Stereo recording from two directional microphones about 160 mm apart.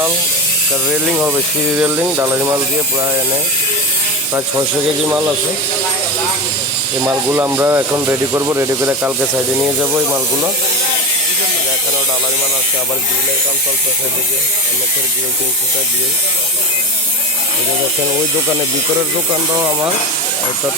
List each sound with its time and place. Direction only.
0.9 s speech: 5° right (ahead or behind)
5.0 s speech: 15° right (ahead or behind)
7.1 s speech: 15° right (ahead or behind)
19.3 s speech: 20° right (ahead or behind)